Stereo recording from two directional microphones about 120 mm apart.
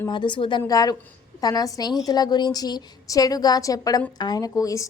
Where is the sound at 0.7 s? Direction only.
30° left (ahead or behind).